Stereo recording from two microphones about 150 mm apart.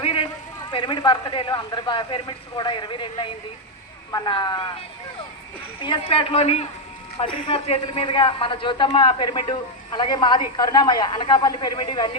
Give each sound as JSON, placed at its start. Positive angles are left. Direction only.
{"t": 0.0, "sound": "a sound", "side_deg": 35}
{"t": 0.7, "sound": "a man's voice", "side_deg": 30}
{"t": 5.8, "sound": "a man's voice", "side_deg": 35}